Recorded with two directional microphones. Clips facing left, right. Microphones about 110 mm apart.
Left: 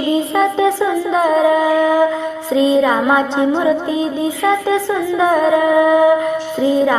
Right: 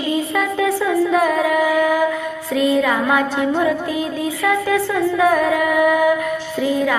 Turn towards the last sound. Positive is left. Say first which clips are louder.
# left 4 dB
turn(degrees=25)  # may be behind; listen again after turning